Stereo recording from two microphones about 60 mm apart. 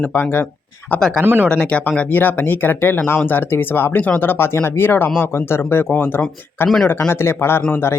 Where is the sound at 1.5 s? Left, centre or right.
Centre.